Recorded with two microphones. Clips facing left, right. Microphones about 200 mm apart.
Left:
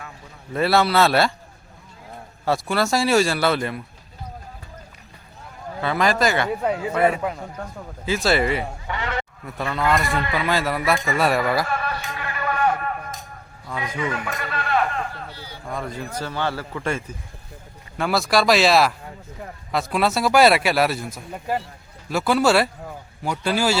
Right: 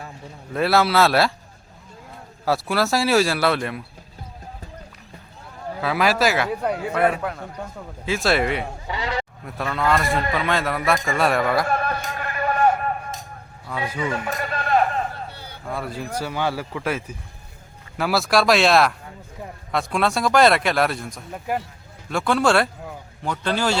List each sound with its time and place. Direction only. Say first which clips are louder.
0.5 s a man's voice: even; centre (ahead or behind)
2.4 s a man's voice: even; centre (ahead or behind)
5.8 s a man's voice: even; 5° right (ahead or behind)
11.7 s music: right 3 dB; 45° right (ahead or behind)
14.3 s a sound: right 2 dB; 40° right (ahead or behind)
15.7 s a man's voice: right 1 dB; 5° right (ahead or behind)